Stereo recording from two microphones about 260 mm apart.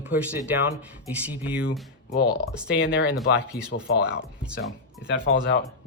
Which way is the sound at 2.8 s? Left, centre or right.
Left.